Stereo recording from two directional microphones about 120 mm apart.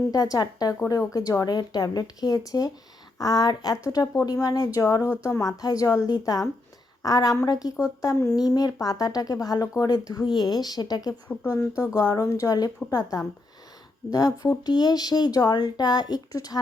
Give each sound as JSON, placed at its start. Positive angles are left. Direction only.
{"t": 0.1, "sound": "speech", "side_deg": 30}